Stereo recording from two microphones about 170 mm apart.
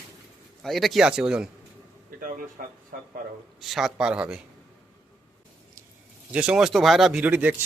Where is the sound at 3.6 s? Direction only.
Centre (ahead or behind).